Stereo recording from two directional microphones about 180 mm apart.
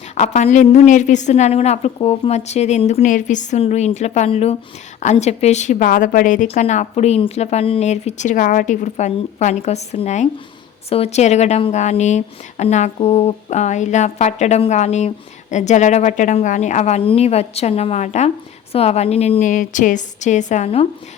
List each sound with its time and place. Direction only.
0.2 s speech: 40° left (ahead or behind)